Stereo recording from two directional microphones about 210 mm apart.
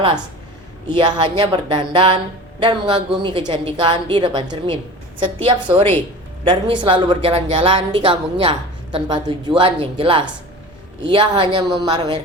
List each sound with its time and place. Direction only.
0.9 s a woman's voice: 20° right (ahead or behind)